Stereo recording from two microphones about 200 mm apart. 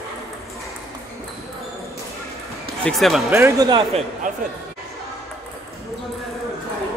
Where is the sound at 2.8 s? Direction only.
Centre (ahead or behind).